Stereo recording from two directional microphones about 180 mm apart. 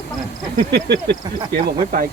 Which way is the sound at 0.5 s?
65° right (ahead or behind).